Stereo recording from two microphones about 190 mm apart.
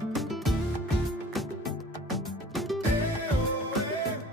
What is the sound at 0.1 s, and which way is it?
Music, centre (ahead or behind).